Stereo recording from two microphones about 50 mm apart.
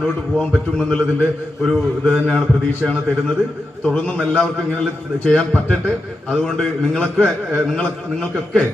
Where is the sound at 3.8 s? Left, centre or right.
Left.